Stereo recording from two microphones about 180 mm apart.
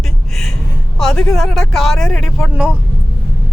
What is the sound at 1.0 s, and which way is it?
Speech, 5° left (ahead or behind).